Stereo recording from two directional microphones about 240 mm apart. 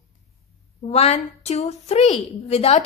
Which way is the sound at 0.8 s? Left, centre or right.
Left.